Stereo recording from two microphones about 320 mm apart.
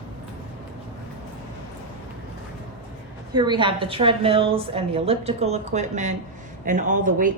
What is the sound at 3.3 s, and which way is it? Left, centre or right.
A woman's voice, centre.